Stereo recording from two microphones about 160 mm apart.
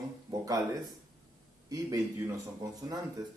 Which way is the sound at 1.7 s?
20° right (ahead or behind).